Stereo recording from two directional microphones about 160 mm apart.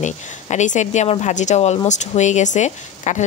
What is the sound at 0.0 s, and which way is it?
Speech, 50° left (ahead or behind).